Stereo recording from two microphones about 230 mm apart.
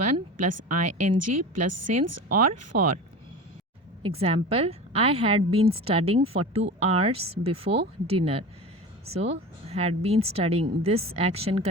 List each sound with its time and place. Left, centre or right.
0.1 s a woman's voice: right
4.0 s speech: right